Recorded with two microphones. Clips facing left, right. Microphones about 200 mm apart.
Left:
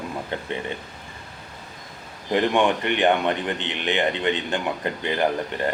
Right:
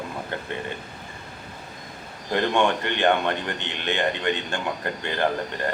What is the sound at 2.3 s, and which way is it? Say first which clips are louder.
A man's voice: left 2 dB; 15° left (ahead or behind).